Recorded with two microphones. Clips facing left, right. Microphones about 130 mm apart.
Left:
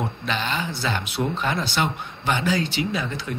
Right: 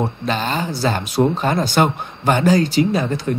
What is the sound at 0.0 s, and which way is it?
Speech, 40° right (ahead or behind).